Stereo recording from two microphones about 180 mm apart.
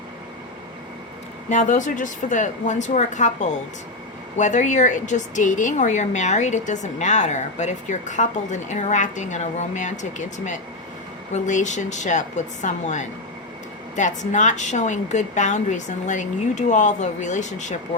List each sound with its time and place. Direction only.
1.5 s speech: 40° left (ahead or behind)